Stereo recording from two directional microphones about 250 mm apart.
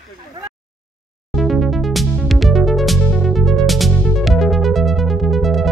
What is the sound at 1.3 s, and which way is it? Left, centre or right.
Music, centre.